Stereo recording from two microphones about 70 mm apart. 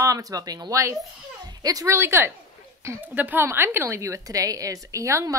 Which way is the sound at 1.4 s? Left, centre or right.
Right.